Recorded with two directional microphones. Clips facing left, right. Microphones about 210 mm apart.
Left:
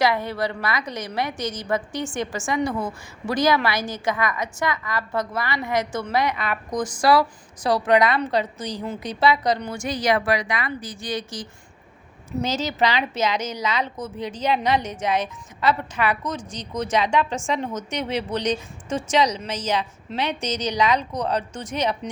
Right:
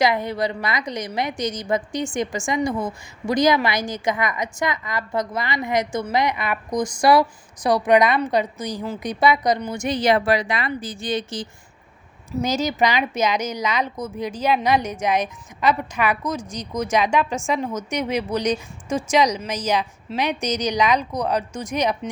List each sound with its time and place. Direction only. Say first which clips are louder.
0.0 s a woman's voice: right 2 dB; 15° right (ahead or behind)
12.4 s a woman's voice: right 2 dB; 10° right (ahead or behind)